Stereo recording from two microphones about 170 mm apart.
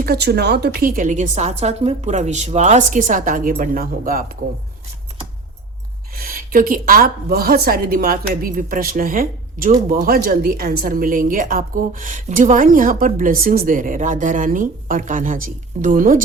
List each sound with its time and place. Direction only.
0.0 s a woman's voice: 65° right (ahead or behind)
6.1 s a woman's voice: 60° right (ahead or behind)